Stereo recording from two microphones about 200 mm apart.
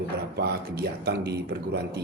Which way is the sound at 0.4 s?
55° right (ahead or behind).